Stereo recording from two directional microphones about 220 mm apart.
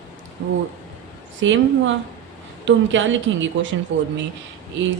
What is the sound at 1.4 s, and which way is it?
A woman's voice, 60° right (ahead or behind).